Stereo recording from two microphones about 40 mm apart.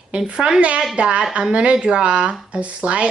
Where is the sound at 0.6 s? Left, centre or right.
Right.